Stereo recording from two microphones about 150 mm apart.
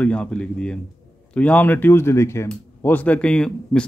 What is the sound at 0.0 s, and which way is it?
A man's voice, 10° left (ahead or behind).